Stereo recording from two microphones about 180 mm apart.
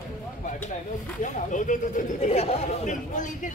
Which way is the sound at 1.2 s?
45° left (ahead or behind).